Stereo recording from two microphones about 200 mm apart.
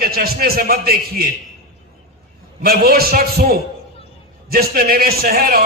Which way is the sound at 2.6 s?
50° right (ahead or behind).